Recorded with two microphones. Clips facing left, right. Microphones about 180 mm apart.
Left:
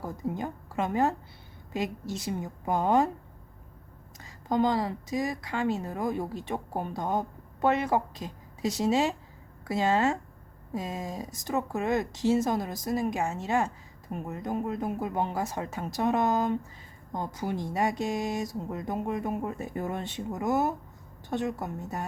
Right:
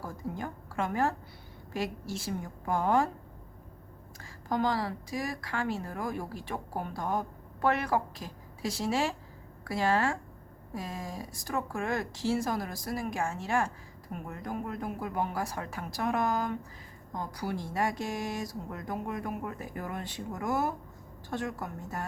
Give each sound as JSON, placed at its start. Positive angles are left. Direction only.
{"t": 0.0, "sound": "speech", "side_deg": 20}
{"t": 4.2, "sound": "speech", "side_deg": 20}